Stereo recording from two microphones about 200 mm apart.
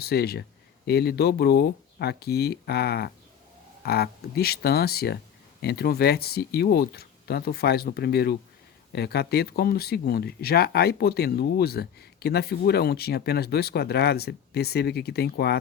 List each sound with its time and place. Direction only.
0.0 s speech: 50° left (ahead or behind)